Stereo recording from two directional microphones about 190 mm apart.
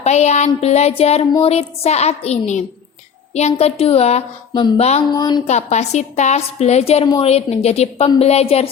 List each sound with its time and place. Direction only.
0.0 s speech: 35° left (ahead or behind)
5.1 s speech: 20° left (ahead or behind)
5.5 s speech: 35° left (ahead or behind)